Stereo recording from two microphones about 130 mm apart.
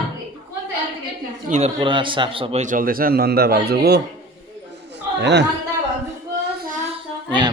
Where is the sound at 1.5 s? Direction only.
65° right (ahead or behind).